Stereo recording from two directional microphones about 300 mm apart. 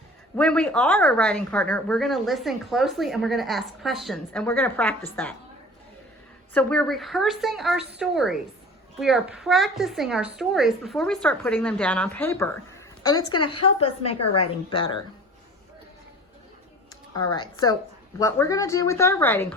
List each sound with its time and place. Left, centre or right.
0.3 s a woman's voice: centre
6.5 s a woman's voice: centre
17.2 s speech: centre